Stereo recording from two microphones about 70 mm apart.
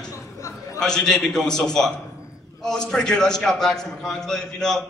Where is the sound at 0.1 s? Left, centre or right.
Left.